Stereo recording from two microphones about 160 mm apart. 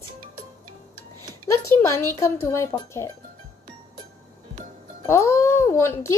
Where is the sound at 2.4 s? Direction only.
20° left (ahead or behind).